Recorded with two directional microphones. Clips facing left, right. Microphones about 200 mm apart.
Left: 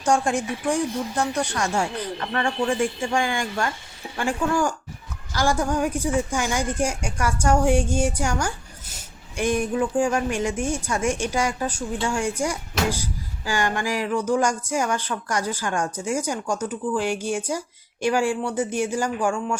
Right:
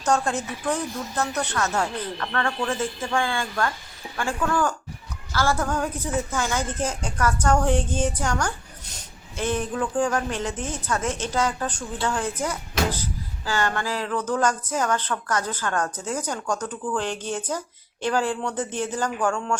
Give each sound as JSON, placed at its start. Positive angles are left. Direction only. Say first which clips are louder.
{"t": 0.0, "sound": "a woman's voice", "louder": "left 2 dB", "side_deg": 10}